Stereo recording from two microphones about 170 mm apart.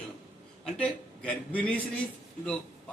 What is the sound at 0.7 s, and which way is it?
A man's voice, 5° left (ahead or behind).